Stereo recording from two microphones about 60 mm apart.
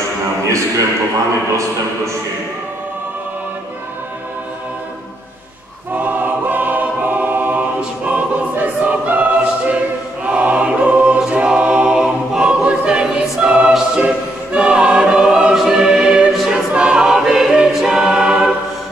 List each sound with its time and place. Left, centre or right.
5.9 s choir: right; by 18.5 s centre